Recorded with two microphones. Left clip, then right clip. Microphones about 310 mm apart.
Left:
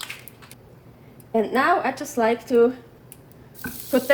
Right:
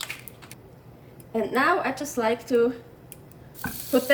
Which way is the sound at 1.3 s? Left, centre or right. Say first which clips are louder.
Left 3 dB; centre.